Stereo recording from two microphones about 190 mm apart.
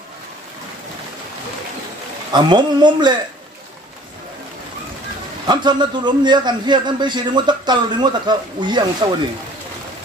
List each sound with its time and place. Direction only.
2.3 s a man's voice: 25° right (ahead or behind)
5.5 s a man's voice: 25° right (ahead or behind)